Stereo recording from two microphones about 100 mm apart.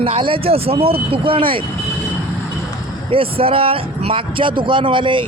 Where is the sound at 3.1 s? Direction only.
65° right (ahead or behind).